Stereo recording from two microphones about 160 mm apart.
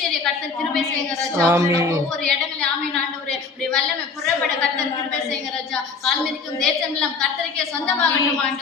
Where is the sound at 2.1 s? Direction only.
5° left (ahead or behind).